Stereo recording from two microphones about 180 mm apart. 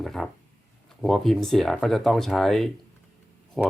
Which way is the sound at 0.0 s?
Centre (ahead or behind).